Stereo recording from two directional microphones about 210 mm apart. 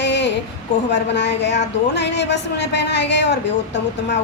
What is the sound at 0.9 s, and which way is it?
A woman's voice, 55° left (ahead or behind).